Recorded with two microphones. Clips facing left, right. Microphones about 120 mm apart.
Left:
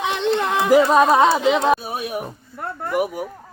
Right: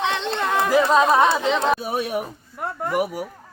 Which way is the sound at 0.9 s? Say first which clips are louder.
Left 2 dB; 20° left (ahead or behind).